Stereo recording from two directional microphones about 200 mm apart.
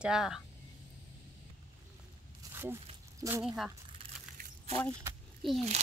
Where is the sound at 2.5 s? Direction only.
10° right (ahead or behind).